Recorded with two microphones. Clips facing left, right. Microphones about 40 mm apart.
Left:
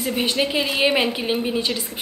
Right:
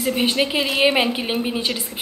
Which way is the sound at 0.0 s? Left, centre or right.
Centre.